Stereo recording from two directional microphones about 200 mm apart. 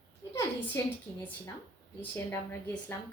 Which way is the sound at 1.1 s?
10° left (ahead or behind).